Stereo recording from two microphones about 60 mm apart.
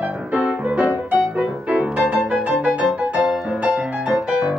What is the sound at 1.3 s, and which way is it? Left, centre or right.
Music, centre.